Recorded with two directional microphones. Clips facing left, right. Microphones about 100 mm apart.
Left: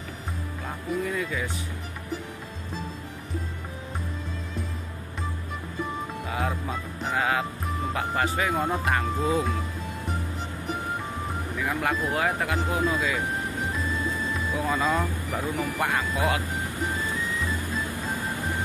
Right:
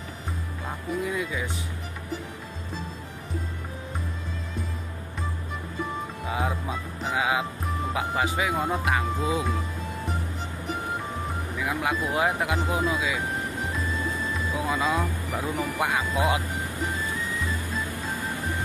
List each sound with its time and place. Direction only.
1.0 s speech: 15° right (ahead or behind)
6.3 s speech: 15° right (ahead or behind)
11.5 s speech: 5° right (ahead or behind)
14.7 s speech: 5° right (ahead or behind)
15.5 s speech: 15° right (ahead or behind)